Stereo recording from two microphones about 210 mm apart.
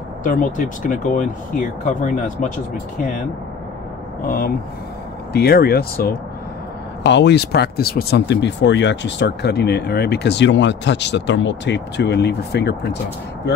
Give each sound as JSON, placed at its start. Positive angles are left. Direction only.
{"t": 0.2, "sound": "speech", "side_deg": 40}
{"t": 4.3, "sound": "speech", "side_deg": 45}